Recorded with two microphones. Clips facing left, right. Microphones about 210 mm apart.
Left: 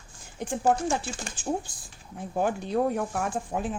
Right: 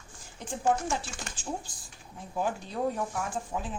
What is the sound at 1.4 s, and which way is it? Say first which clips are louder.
A woman's voice: left 7 dB; 55° left (ahead or behind).